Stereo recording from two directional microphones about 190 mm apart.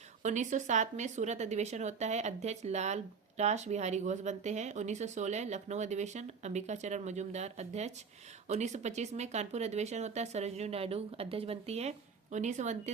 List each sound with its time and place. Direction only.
0.2 s speech: 40° right (ahead or behind)